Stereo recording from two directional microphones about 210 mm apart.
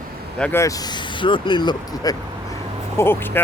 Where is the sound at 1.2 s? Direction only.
20° left (ahead or behind).